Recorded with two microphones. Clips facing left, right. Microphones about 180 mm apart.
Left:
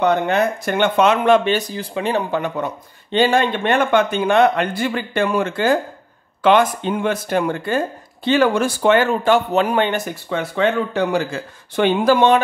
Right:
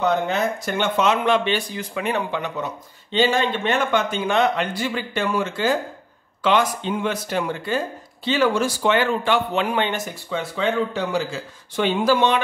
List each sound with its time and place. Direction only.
0.0 s speech: 60° left (ahead or behind); by 2.2 s 30° left (ahead or behind)
2.3 s speech: 50° left (ahead or behind)